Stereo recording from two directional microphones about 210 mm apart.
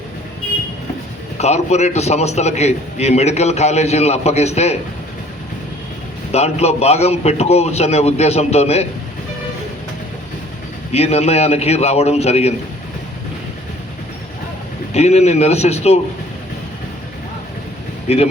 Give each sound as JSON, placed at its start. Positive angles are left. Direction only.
{"t": 1.4, "sound": "a man's voice", "side_deg": 30}
{"t": 6.3, "sound": "a man's voice", "side_deg": 30}
{"t": 10.9, "sound": "a man's voice", "side_deg": 30}
{"t": 14.9, "sound": "a man's voice", "side_deg": 30}
{"t": 18.1, "sound": "a man's voice", "side_deg": 30}